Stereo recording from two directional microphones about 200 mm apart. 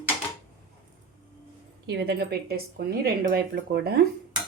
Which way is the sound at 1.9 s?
55° right (ahead or behind).